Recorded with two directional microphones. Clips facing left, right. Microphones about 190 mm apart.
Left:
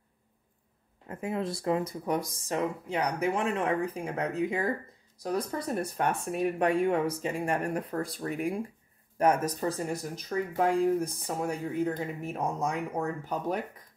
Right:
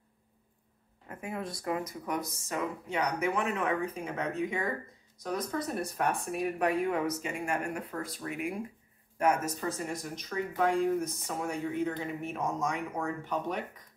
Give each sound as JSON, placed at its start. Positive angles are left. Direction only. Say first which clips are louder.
{"t": 1.0, "sound": "speech", "louder": "left 5 dB", "side_deg": 25}